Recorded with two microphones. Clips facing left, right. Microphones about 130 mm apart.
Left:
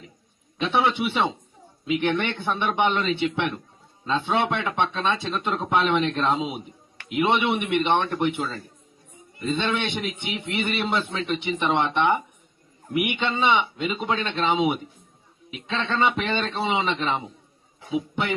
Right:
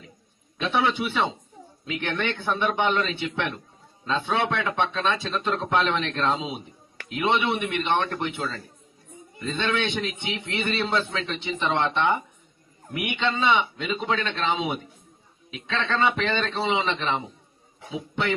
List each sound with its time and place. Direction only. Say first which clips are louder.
0.6 s a man's voice: left 2 dB; 20° left (ahead or behind)
13.1 s speech: right 1 dB; 15° left (ahead or behind)